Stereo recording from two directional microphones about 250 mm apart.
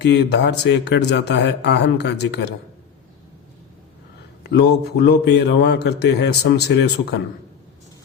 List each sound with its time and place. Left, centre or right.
0.0 s a man's voice: left
4.4 s a man's voice: left